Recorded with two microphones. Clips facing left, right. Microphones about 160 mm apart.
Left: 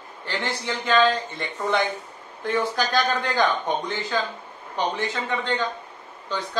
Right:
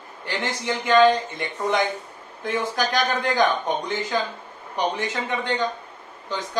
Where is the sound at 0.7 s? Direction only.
15° right (ahead or behind).